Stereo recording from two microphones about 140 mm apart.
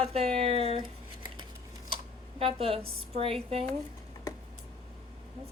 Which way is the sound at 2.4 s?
45° right (ahead or behind).